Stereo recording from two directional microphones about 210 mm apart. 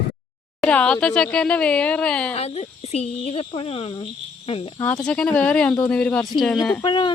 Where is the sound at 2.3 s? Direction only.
30° left (ahead or behind).